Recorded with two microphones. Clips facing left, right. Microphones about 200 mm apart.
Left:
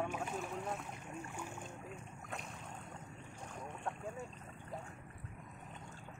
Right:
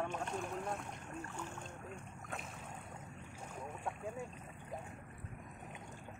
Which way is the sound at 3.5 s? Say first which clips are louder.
Even; 5° right (ahead or behind).